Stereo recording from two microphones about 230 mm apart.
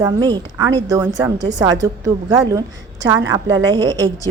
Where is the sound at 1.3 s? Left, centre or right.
Right.